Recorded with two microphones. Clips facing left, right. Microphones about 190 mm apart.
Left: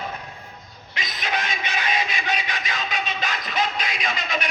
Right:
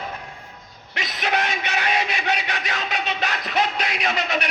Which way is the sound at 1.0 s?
65° right (ahead or behind).